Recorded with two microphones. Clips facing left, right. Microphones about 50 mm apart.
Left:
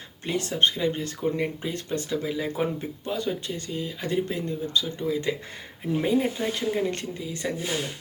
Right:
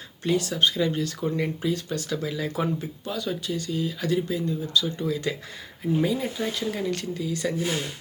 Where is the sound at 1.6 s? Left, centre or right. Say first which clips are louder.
Right 2 dB; left.